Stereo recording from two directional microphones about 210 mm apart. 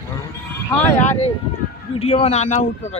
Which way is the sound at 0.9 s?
35° left (ahead or behind).